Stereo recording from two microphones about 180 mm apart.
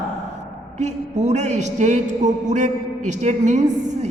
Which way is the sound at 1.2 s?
40° right (ahead or behind).